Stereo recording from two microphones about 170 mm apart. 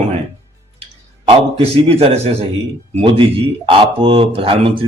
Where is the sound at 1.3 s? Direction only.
35° right (ahead or behind).